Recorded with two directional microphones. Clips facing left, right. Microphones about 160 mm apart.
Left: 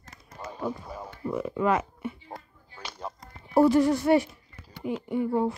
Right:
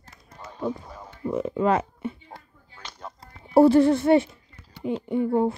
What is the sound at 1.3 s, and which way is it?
Speech, 25° right (ahead or behind).